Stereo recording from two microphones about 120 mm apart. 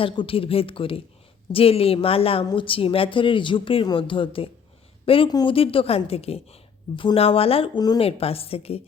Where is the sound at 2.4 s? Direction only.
35° left (ahead or behind).